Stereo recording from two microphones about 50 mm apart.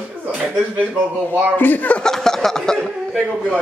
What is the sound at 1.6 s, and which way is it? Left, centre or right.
Speech, left.